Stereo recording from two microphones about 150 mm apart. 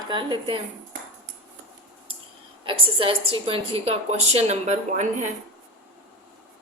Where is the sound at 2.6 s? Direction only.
35° right (ahead or behind).